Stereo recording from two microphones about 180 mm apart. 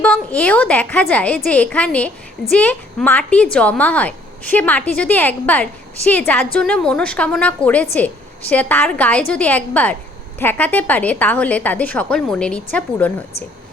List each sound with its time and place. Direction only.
0.0 s a woman's voice: 5° left (ahead or behind)